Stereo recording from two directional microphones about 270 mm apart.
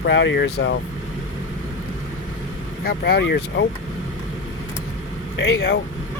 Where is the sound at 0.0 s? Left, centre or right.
Left.